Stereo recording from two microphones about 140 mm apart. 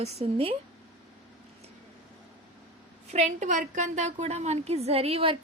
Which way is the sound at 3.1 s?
55° right (ahead or behind).